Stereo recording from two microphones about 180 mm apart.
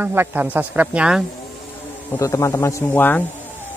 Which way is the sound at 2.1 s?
15° left (ahead or behind).